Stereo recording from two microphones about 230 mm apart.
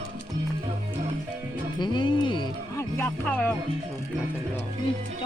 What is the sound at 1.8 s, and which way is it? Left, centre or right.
Speech, centre.